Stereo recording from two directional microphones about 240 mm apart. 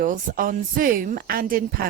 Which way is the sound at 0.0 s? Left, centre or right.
Right.